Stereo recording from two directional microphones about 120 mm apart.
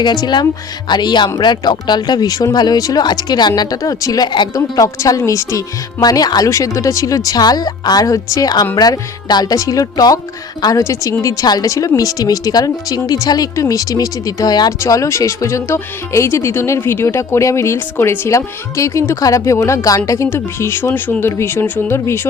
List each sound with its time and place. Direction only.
0.0 s a woman's voice: 35° left (ahead or behind); by 22.3 s 20° left (ahead or behind)